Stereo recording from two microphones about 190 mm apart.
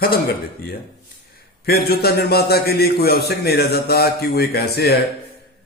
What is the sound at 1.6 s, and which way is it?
A man's voice, 55° left (ahead or behind).